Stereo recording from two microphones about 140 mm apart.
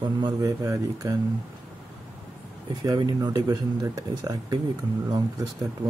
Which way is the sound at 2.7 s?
30° right (ahead or behind).